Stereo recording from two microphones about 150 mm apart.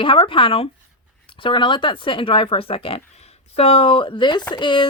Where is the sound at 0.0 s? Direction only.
35° left (ahead or behind).